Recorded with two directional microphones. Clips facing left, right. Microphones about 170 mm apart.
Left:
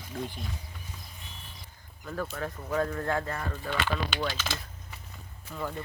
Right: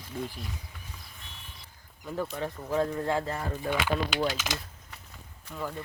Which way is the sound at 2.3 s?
15° right (ahead or behind).